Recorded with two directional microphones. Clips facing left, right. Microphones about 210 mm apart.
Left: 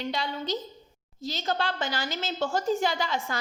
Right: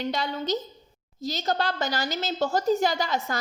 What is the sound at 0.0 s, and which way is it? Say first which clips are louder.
A woman's voice: right 3 dB; 45° right (ahead or behind).